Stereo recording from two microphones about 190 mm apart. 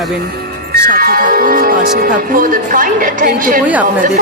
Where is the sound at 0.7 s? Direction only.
50° right (ahead or behind).